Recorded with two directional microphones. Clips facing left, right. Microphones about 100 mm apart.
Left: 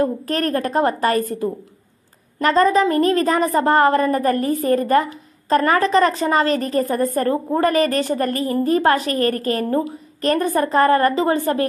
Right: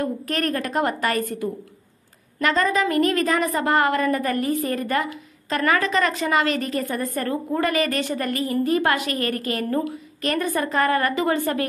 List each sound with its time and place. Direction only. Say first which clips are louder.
0.0 s a woman's voice: left 5 dB; 35° left (ahead or behind)